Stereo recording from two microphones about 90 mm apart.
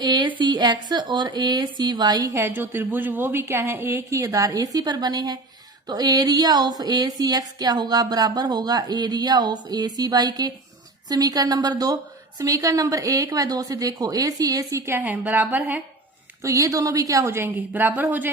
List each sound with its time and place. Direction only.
0.0 s a woman's voice: 55° right (ahead or behind); by 14.9 s 35° right (ahead or behind)
14.9 s a woman's voice: 20° right (ahead or behind)
16.4 s a woman's voice: 35° right (ahead or behind); by 18.0 s 20° right (ahead or behind)